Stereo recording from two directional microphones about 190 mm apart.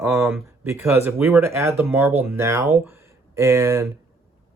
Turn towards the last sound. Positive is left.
turn(degrees=-15)  # may be behind; listen again after turning